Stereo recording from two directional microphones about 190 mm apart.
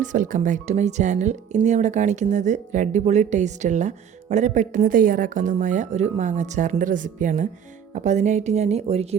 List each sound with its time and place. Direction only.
0.0 s speech: 40° right (ahead or behind)